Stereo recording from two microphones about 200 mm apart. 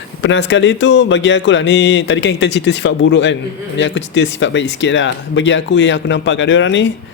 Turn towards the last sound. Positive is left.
turn(degrees=65)  # may be behind; listen again after turning